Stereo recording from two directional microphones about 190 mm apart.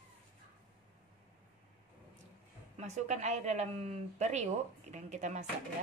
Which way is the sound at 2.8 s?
35° right (ahead or behind).